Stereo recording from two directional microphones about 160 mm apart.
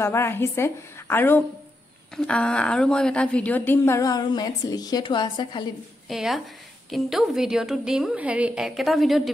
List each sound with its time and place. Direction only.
0.0 s a woman's voice: 15° left (ahead or behind)
6.0 s a woman's voice: centre (ahead or behind)